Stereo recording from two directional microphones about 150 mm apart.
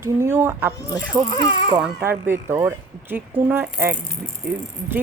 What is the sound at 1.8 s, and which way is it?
Speech, 15° right (ahead or behind).